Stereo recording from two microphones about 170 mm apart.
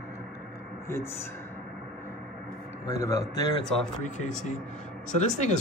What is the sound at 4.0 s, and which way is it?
Speech, 45° left (ahead or behind).